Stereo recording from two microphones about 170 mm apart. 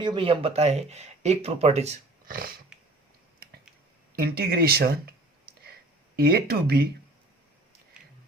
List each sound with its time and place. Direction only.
0.0 s speech: 30° right (ahead or behind)
4.1 s speech: 60° right (ahead or behind)
5.5 s a sound: 65° right (ahead or behind)
6.1 s speech: 65° right (ahead or behind)